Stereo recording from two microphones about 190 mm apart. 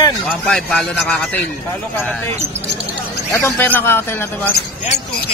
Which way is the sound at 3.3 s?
10° left (ahead or behind).